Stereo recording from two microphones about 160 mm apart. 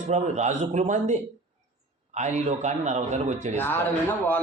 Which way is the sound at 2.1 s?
45° right (ahead or behind).